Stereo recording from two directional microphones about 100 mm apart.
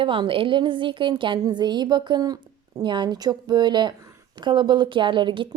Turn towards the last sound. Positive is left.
turn(degrees=-55)  # may be behind; listen again after turning